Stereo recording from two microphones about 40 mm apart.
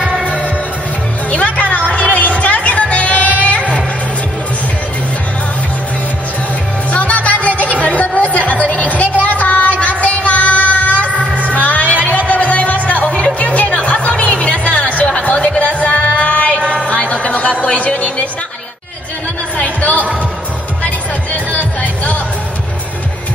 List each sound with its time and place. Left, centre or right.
1.3 s music: left
6.9 s music: left
7.8 s a sound: left
11.1 s music: right
11.5 s music: left
19.5 s music: left
21.5 s music: left